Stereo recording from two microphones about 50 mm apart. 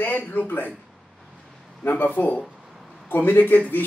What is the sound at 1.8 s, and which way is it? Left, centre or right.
A man's voice, left.